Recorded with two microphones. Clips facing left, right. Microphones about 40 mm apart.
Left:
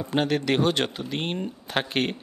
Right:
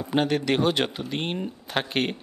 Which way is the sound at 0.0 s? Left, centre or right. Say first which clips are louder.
Right 1 dB; centre.